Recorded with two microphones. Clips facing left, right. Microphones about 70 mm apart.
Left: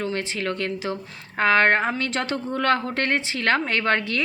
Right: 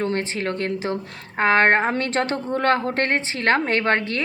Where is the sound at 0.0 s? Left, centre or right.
Right.